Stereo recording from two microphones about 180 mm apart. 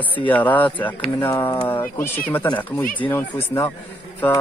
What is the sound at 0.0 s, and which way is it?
Speech, 10° left (ahead or behind).